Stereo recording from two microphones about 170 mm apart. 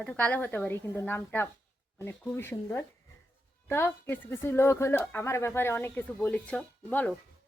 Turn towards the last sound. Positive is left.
turn(degrees=10)  # may be behind; listen again after turning